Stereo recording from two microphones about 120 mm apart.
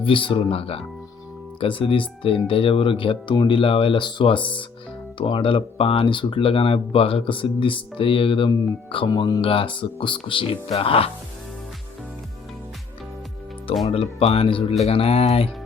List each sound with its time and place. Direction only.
0.0 s speech: 45° left (ahead or behind)
13.8 s speech: 55° left (ahead or behind)